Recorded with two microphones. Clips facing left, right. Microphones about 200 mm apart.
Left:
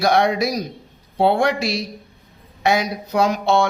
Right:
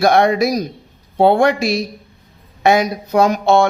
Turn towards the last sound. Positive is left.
turn(degrees=-50)  # may be behind; listen again after turning